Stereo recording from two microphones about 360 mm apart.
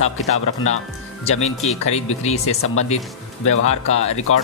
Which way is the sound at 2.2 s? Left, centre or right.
Centre.